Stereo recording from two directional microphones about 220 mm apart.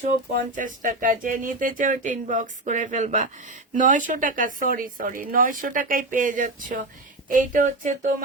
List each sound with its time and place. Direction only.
0.5 s speech: 35° right (ahead or behind)